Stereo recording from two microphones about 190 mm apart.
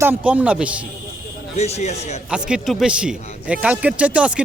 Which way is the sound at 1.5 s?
35° left (ahead or behind).